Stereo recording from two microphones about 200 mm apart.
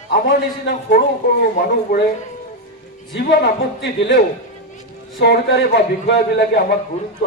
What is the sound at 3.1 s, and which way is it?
Speech, 50° left (ahead or behind).